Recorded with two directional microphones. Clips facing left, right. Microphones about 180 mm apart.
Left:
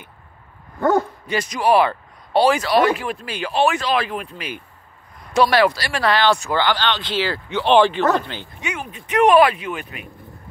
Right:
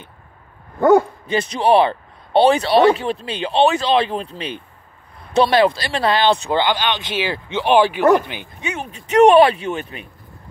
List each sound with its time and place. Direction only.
1.2 s speech: 25° right (ahead or behind)
8.6 s speech: 30° right (ahead or behind)